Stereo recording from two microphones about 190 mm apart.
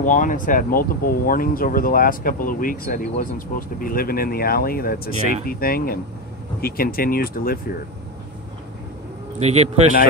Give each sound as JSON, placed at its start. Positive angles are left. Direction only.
{"t": 0.0, "sound": "speech", "side_deg": 45}
{"t": 9.4, "sound": "a man's voice", "side_deg": -35}